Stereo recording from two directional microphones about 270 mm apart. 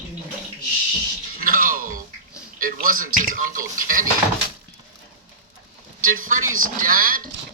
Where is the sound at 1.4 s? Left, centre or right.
Right.